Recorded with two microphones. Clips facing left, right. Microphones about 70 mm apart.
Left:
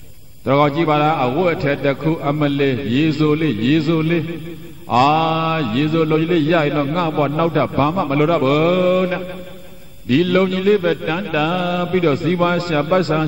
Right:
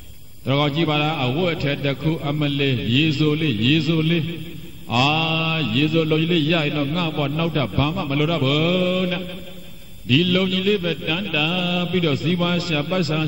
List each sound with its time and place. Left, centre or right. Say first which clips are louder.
0.5 s speech: left 6 dB; left